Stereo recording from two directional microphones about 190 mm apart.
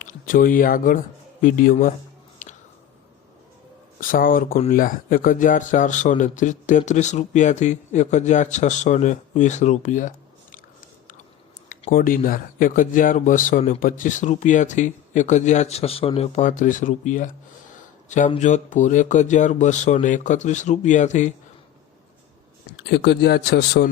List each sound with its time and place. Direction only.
0.0 s speech: 45° left (ahead or behind)
4.0 s speech: 45° left (ahead or behind)
11.9 s speech: 45° left (ahead or behind)
22.9 s speech: 60° left (ahead or behind)